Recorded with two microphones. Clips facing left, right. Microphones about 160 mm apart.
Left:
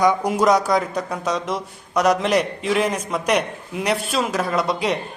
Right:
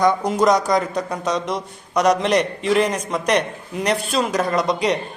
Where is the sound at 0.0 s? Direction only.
10° left (ahead or behind).